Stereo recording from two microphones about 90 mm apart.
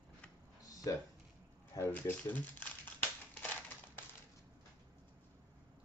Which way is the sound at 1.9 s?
20° left (ahead or behind).